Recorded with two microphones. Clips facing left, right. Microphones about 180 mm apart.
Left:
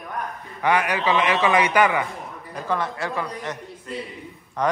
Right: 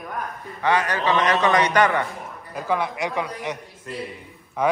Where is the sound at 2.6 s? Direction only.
10° right (ahead or behind).